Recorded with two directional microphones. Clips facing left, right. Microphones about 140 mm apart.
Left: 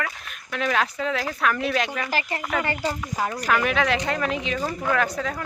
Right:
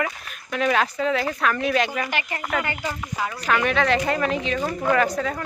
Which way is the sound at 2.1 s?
35° left (ahead or behind).